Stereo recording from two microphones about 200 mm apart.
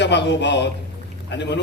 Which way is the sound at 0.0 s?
60° left (ahead or behind).